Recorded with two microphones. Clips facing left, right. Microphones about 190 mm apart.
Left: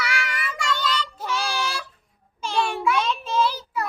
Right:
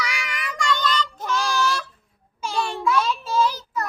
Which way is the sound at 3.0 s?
5° right (ahead or behind).